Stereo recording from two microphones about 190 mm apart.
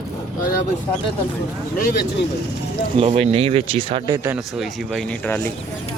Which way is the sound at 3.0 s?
30° right (ahead or behind).